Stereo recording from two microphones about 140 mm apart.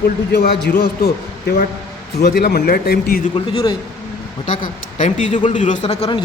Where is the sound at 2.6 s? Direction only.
90° left.